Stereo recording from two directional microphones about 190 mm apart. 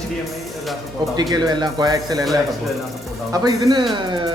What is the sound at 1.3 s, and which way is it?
Speech, 20° right (ahead or behind).